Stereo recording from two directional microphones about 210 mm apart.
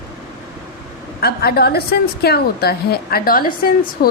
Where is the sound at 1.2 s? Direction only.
50° left (ahead or behind).